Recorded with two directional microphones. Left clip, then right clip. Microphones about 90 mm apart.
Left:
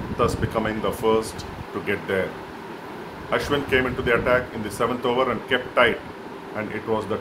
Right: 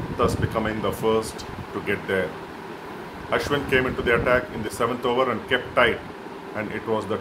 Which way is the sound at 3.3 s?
10° right (ahead or behind).